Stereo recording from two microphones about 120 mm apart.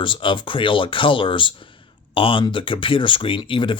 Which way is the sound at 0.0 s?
45° left (ahead or behind).